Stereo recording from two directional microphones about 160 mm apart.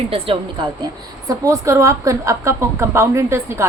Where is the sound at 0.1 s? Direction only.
30° right (ahead or behind).